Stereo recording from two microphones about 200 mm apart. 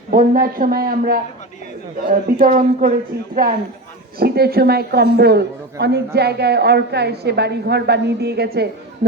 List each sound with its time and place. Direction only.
0.1 s a man's voice: 45° right (ahead or behind)